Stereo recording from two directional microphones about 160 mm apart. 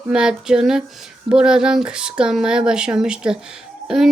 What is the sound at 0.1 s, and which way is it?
A woman's voice, 5° right (ahead or behind).